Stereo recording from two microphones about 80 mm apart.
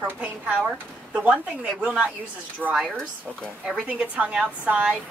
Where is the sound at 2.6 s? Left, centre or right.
Centre.